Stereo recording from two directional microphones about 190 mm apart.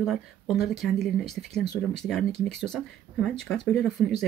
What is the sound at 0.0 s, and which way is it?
Speech, centre (ahead or behind).